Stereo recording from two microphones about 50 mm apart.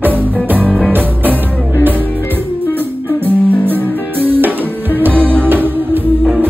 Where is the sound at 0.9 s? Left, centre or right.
Right.